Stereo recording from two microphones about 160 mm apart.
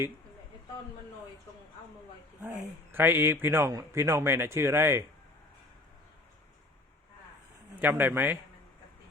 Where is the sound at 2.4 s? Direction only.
10° right (ahead or behind).